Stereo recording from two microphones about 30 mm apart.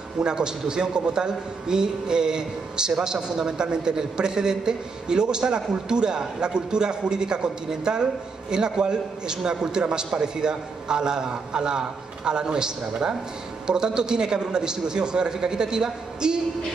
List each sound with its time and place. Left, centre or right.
0.2 s a man's voice: right